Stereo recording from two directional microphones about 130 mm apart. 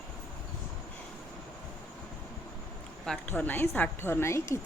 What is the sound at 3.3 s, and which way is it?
A woman's voice, 15° left (ahead or behind).